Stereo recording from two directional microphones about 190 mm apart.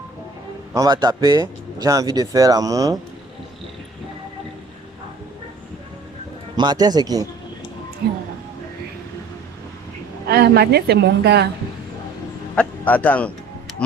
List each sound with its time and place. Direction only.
0.7 s speech: 20° right (ahead or behind)
6.6 s speech: 20° right (ahead or behind)
10.2 s a woman's voice: 60° right (ahead or behind)
12.5 s music: 10° left (ahead or behind)